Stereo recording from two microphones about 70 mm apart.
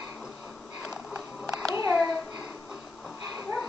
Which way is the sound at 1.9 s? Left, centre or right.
Right.